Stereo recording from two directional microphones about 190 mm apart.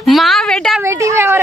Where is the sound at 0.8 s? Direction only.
15° right (ahead or behind).